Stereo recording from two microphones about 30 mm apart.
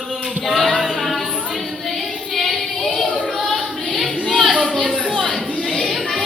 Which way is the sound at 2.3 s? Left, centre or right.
Centre.